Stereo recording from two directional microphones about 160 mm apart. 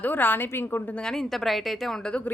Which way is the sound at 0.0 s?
10° left (ahead or behind).